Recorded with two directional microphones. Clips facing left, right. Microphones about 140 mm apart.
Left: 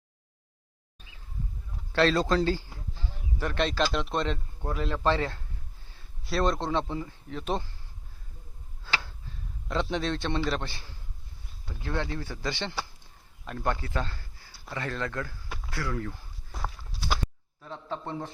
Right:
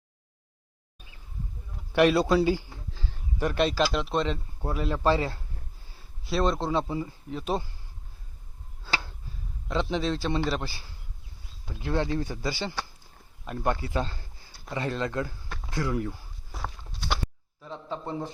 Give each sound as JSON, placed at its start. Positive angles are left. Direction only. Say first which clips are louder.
{"t": 1.9, "sound": "speech", "louder": "right 3 dB", "side_deg": -15}
{"t": 9.6, "sound": "speech", "louder": "right 2 dB", "side_deg": 0}
{"t": 13.8, "sound": "a sound", "louder": "right 3 dB", "side_deg": -15}
{"t": 14.7, "sound": "speech", "louder": "right 3 dB", "side_deg": -20}
{"t": 16.5, "sound": "walk", "louder": "even", "side_deg": 0}
{"t": 17.6, "sound": "speech", "louder": "right 1 dB", "side_deg": 0}